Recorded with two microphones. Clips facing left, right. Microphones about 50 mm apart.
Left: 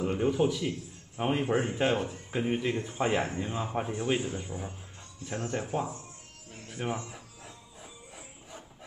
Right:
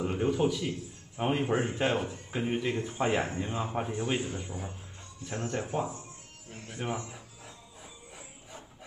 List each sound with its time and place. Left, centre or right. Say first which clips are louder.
0.0 s a man's voice: left 1 dB; centre
7.1 s music: left 1 dB; centre